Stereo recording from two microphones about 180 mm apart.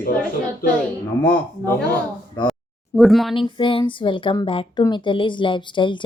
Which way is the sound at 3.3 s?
30° left (ahead or behind).